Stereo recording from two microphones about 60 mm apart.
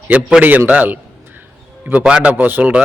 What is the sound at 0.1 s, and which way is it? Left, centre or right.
Speech, centre.